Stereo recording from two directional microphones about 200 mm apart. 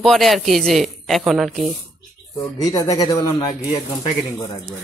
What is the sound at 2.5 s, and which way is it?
Speech, 15° left (ahead or behind).